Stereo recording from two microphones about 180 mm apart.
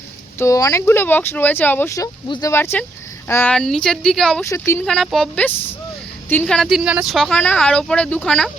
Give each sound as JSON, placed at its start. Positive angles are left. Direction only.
{"t": 0.3, "sound": "speech", "side_deg": 15}
{"t": 2.2, "sound": "speech", "side_deg": 25}
{"t": 2.5, "sound": "speech", "side_deg": 15}
{"t": 4.4, "sound": "speech", "side_deg": 15}
{"t": 4.9, "sound": "speech", "side_deg": 0}